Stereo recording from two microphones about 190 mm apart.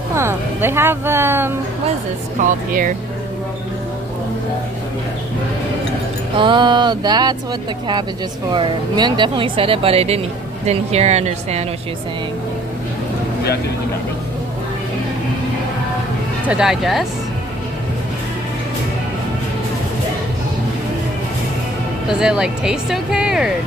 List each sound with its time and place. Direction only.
0.1 s speech: 15° right (ahead or behind)
2.4 s speech: 45° right (ahead or behind)
6.3 s a sound: 25° right (ahead or behind)
8.5 s speech: 25° right (ahead or behind)
16.4 s speech: 5° right (ahead or behind)
22.2 s speech: 5° right (ahead or behind)